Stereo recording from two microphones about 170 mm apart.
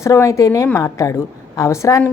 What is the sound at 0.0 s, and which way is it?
A woman's voice, 20° left (ahead or behind).